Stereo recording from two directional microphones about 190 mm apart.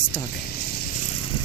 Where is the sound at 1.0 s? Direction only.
35° left (ahead or behind).